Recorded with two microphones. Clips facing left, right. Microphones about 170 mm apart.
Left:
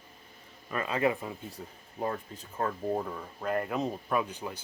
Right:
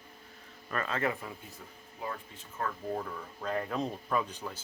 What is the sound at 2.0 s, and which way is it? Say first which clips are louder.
Speech: left 6 dB; 40° left (ahead or behind).